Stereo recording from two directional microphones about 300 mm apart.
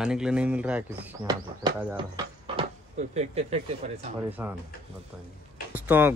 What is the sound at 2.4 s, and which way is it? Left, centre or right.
Speech, centre.